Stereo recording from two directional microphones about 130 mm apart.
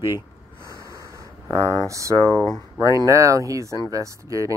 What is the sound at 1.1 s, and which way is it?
Speech, 25° right (ahead or behind).